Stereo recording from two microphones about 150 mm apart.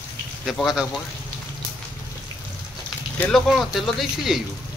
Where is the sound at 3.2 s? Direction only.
5° left (ahead or behind).